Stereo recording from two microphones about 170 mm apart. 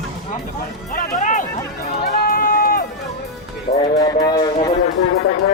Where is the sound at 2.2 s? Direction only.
60° left (ahead or behind).